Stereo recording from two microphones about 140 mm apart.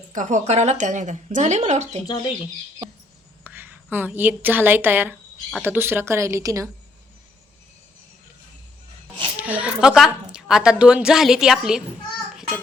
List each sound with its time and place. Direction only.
0.1 s speech: 60° right (ahead or behind)
3.4 s a woman's voice: 15° right (ahead or behind)
9.4 s a woman's voice: 10° right (ahead or behind)